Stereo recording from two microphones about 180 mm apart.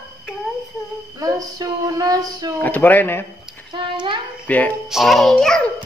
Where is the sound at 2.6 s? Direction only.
10° left (ahead or behind).